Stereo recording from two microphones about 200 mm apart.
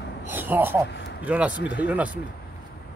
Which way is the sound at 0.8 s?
60° left (ahead or behind).